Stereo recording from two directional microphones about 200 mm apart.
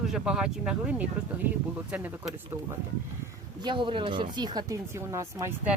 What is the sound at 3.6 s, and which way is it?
Speech, 25° right (ahead or behind).